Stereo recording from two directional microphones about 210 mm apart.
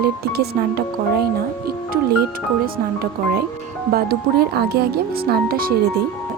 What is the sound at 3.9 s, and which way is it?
Speech, 50° right (ahead or behind).